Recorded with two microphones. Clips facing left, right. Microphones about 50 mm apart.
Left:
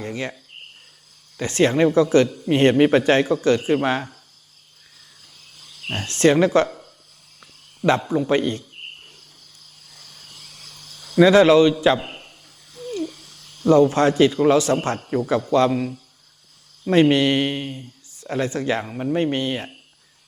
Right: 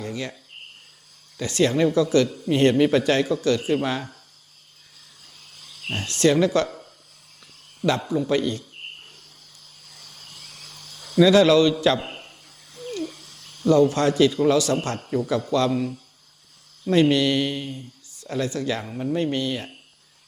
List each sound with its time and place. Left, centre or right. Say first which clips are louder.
0.0 s cricket: left 2 dB; left
1.4 s speech: left 3 dB; left
5.9 s speech: left 3 dB; left
7.9 s speech: left 3 dB; left
10.0 s a sound: even; right
11.1 s speech: left 3 dB; left
11.9 s speech: even; centre
13.0 s a sound: left 3 dB; right
13.7 s a man's voice: left 3 dB; left